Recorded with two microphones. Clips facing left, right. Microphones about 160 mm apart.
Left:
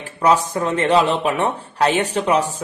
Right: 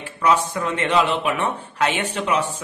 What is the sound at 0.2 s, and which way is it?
Speech, 35° left (ahead or behind).